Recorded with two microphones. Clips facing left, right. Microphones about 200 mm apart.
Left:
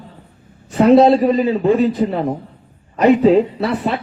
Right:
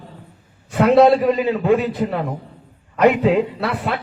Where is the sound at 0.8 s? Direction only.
35° left (ahead or behind).